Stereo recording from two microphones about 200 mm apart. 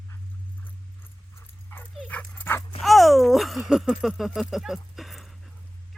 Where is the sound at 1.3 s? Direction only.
10° left (ahead or behind).